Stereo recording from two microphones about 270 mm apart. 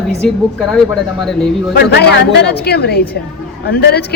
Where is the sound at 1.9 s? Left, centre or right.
Left.